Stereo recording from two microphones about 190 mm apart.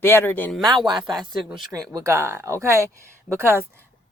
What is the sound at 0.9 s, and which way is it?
Speech, centre (ahead or behind).